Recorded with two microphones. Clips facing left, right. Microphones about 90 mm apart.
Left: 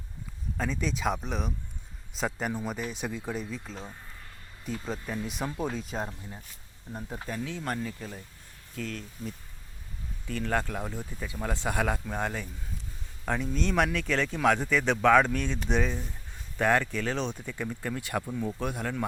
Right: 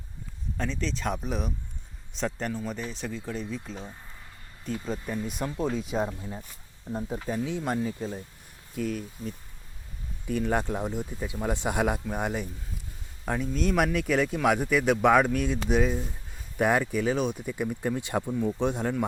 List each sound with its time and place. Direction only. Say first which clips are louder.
0.5 s speech: even; 5° left (ahead or behind)
2.5 s speech: even; 15° left (ahead or behind); by 6.1 s 5° right (ahead or behind)
7.3 s speech: right 4 dB; 20° right (ahead or behind)
8.7 s speech: right 6 dB; 10° right (ahead or behind)
10.2 s speech: right 3 dB; 15° right (ahead or behind)
13.2 s speech: right 2 dB; 5° right (ahead or behind); by 18.9 s 20° right (ahead or behind)